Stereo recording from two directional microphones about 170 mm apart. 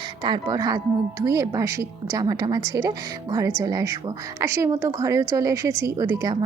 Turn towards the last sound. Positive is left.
turn(degrees=-20)  # may be behind; listen again after turning